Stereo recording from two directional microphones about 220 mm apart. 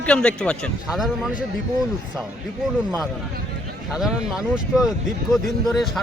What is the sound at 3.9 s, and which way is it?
A man's voice, centre (ahead or behind).